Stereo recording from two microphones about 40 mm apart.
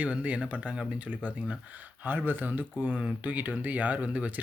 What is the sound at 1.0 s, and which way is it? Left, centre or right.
Speech, right.